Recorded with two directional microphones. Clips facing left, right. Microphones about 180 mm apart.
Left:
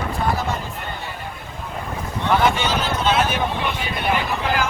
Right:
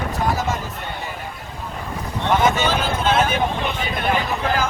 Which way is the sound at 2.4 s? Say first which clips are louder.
Right 1 dB; 50° right (ahead or behind).